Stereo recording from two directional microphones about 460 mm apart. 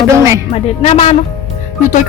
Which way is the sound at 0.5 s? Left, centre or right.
Centre.